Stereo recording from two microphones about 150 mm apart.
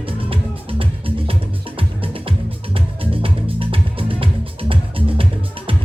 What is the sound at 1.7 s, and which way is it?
Music, 35° right (ahead or behind).